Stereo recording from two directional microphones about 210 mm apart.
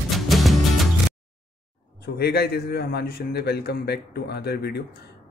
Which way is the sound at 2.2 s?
50° left (ahead or behind).